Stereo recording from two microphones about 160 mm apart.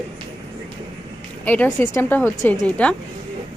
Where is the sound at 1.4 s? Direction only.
10° left (ahead or behind).